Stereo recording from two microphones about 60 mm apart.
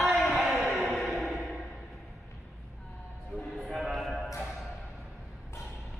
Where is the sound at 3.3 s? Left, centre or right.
Centre.